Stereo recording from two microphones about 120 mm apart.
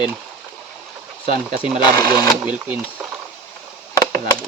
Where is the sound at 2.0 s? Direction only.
35° left (ahead or behind).